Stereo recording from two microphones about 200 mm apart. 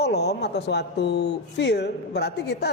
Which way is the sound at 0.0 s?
55° left (ahead or behind).